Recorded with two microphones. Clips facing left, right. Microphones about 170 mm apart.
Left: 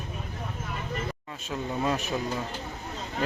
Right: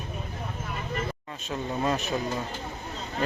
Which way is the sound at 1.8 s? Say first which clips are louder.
Right 1 dB; 5° left (ahead or behind).